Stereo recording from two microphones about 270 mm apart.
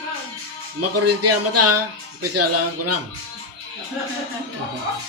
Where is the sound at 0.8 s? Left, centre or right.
Right.